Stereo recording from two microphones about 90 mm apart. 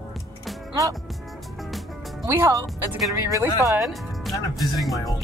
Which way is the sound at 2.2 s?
35° right (ahead or behind).